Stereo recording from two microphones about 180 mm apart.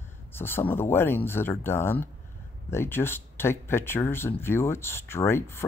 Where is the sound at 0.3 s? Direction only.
10° left (ahead or behind).